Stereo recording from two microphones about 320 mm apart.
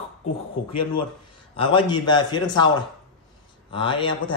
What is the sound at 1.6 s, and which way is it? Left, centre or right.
Speech, centre.